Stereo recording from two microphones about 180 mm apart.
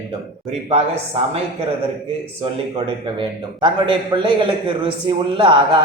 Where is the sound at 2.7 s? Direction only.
25° right (ahead or behind).